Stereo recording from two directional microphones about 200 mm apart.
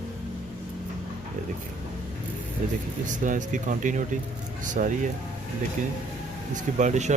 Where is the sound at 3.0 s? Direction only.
40° right (ahead or behind).